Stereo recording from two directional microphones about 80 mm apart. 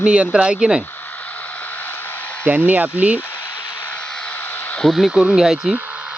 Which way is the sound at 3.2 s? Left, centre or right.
Left.